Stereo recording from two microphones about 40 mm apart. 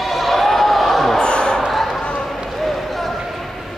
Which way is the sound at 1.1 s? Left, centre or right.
Left.